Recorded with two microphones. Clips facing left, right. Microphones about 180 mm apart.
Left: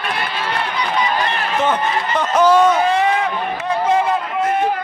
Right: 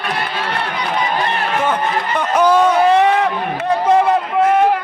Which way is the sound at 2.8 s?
55° right (ahead or behind).